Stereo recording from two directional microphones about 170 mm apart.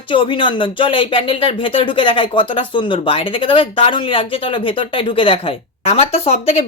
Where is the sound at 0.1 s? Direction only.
30° left (ahead or behind).